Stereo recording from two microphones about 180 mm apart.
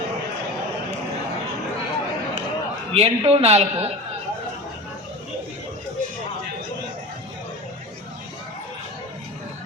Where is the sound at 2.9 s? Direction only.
35° right (ahead or behind).